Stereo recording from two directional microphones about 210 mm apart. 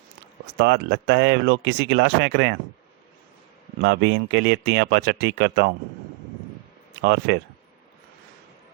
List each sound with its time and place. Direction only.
0.6 s speech: 55° right (ahead or behind)
3.8 s speech: 60° right (ahead or behind)
7.0 s speech: 60° right (ahead or behind)